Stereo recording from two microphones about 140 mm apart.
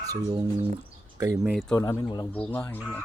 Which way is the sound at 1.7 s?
25° left (ahead or behind).